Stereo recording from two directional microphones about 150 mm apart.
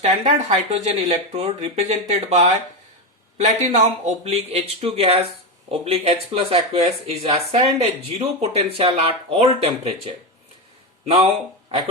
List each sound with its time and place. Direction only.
0.0 s speech: 45° right (ahead or behind)
11.7 s speech: 45° right (ahead or behind)